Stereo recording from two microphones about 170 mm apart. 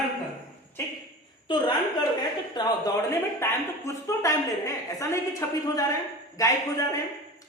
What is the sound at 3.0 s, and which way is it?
A woman's voice, 15° left (ahead or behind).